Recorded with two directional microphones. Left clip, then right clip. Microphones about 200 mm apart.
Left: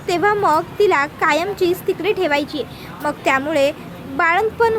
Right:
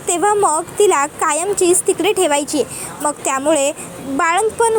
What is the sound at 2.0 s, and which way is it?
A woman's voice, 15° right (ahead or behind).